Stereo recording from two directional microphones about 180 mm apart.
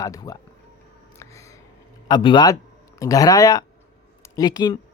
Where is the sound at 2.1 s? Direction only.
25° left (ahead or behind).